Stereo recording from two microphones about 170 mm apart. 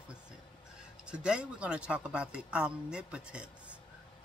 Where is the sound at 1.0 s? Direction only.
5° right (ahead or behind).